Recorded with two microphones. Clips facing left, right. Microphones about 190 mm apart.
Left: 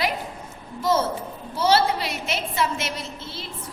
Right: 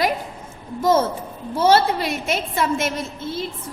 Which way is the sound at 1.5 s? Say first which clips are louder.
Right 4 dB; 50° right (ahead or behind).